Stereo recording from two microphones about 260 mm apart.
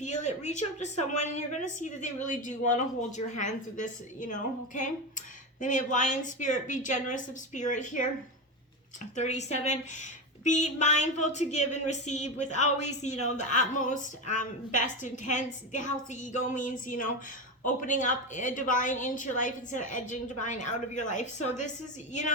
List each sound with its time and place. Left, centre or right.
0.0 s a woman's voice: left
9.1 s a woman's voice: left